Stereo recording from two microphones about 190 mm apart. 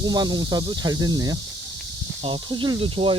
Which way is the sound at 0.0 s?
20° right (ahead or behind).